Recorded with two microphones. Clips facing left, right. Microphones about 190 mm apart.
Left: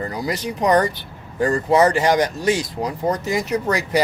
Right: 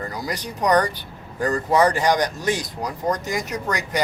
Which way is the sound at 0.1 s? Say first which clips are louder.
Left 4 dB; 25° left (ahead or behind).